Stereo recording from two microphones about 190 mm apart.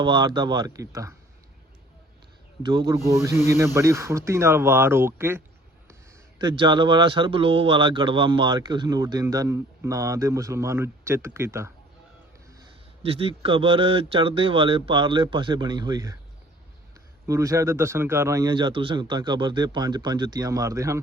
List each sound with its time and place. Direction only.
0.0 s speech: 25° right (ahead or behind)
2.6 s speech: 20° right (ahead or behind)
6.4 s speech: 25° right (ahead or behind)
13.0 s speech: 30° right (ahead or behind)
17.2 s speech: 15° right (ahead or behind)